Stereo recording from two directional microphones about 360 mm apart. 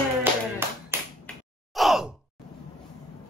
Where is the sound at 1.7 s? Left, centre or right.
Centre.